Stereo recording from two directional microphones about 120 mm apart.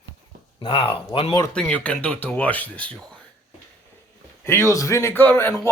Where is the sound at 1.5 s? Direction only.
10° left (ahead or behind).